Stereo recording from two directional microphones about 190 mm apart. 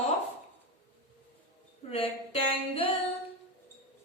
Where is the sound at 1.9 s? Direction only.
30° left (ahead or behind).